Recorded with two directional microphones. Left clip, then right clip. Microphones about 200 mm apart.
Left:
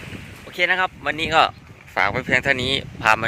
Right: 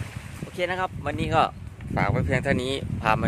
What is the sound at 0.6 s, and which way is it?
Speech, 10° right (ahead or behind).